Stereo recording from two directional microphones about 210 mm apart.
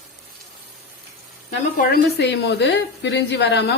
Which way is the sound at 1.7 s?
50° left (ahead or behind).